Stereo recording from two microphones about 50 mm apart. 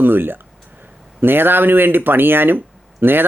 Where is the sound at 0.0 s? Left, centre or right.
Right.